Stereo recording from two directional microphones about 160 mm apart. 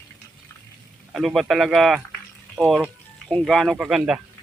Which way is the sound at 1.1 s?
Centre (ahead or behind).